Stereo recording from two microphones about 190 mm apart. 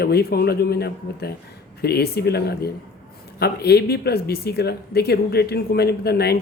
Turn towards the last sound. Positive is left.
turn(degrees=55)  # may be behind; listen again after turning